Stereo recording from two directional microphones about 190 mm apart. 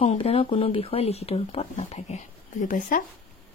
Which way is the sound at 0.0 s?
30° left (ahead or behind).